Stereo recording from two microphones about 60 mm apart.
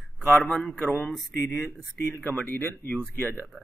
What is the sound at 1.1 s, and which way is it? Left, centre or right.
Speech, centre.